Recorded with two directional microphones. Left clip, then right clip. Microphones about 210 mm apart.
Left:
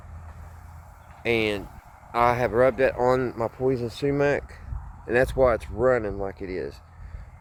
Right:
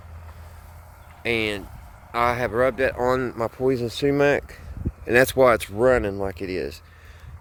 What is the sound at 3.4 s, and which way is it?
Speech, 35° right (ahead or behind).